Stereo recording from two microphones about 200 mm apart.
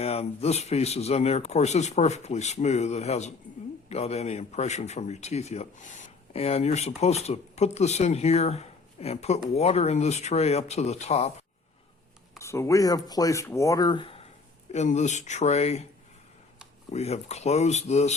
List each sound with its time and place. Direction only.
0.0 s speech: 30° left (ahead or behind)
12.4 s speech: 15° left (ahead or behind); by 15.9 s 30° left (ahead or behind)
16.9 s speech: 35° left (ahead or behind)